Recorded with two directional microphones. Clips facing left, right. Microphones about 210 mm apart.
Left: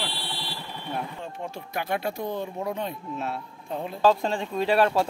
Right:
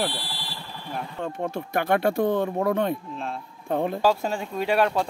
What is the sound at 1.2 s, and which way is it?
Speech, 55° right (ahead or behind).